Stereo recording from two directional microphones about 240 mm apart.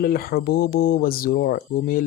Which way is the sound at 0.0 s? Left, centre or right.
Left.